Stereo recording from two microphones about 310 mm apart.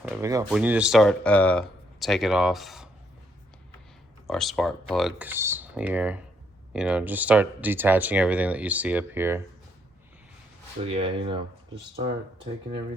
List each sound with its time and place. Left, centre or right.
0.0 s speech: centre
4.3 s speech: centre
10.8 s speech: centre